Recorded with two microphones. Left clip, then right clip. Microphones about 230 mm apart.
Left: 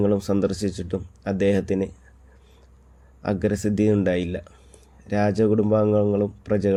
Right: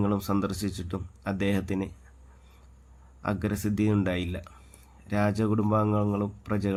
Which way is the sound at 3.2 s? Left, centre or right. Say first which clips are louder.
Left 7 dB; centre.